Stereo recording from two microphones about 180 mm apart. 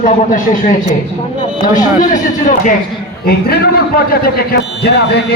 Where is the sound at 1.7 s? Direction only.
45° left (ahead or behind).